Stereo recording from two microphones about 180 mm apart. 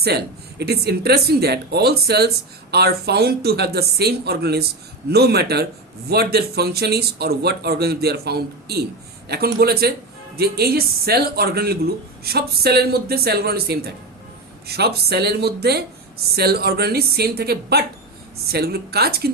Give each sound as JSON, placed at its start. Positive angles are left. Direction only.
{"t": 0.6, "sound": "speech", "side_deg": -65}